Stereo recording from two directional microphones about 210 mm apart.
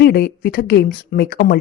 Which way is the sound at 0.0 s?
50° left (ahead or behind).